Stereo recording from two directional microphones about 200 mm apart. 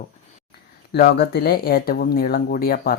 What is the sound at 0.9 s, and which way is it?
Speech, 55° left (ahead or behind).